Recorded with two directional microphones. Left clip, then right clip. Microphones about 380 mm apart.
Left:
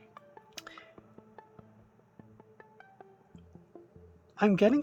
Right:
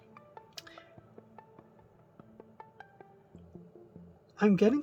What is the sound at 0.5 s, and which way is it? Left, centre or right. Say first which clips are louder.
Music: left 3 dB; centre.